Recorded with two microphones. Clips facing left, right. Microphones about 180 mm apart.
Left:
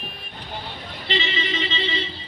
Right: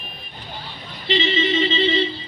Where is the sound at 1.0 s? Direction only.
20° right (ahead or behind).